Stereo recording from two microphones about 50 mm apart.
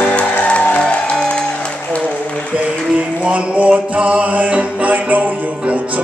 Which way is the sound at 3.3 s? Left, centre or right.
Right.